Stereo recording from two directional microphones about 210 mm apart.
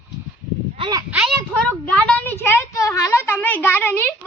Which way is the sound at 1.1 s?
Centre (ahead or behind).